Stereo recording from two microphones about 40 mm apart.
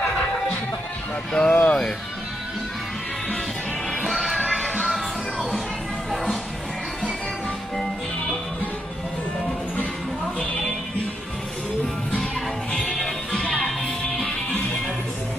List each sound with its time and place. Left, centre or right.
1.3 s speech: centre
1.6 s speech: left
4.0 s music: centre
7.7 s music: centre
12.7 s music: centre
13.3 s music: centre